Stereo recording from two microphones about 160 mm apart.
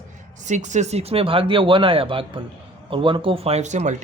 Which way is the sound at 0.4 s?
50° right (ahead or behind).